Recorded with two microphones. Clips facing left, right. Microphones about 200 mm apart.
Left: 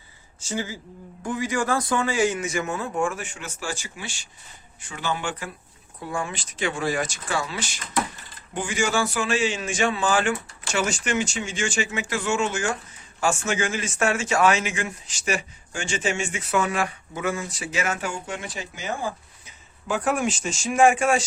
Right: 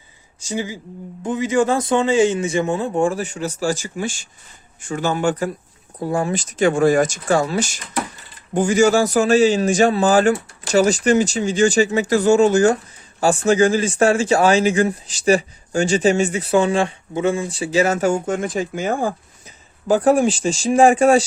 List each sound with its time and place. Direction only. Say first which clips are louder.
0.4 s a man's voice: right 5 dB; 15° right (ahead or behind); by 21.2 s 35° right (ahead or behind)